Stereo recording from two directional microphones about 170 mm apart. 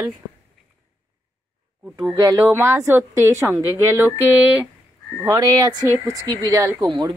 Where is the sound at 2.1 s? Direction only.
20° right (ahead or behind).